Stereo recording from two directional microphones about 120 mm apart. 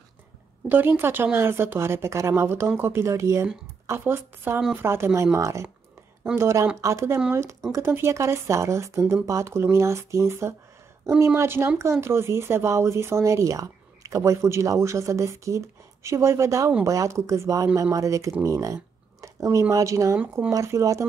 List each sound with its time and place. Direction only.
0.7 s speech: 15° right (ahead or behind)
19.2 s a sound: 25° right (ahead or behind)
19.7 s speech: 30° right (ahead or behind)